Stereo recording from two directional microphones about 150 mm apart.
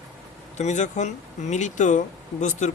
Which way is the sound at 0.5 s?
50° left (ahead or behind).